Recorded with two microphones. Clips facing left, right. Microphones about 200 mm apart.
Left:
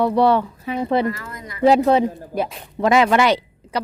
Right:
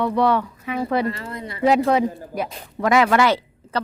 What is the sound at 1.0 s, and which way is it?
Speech, 30° right (ahead or behind).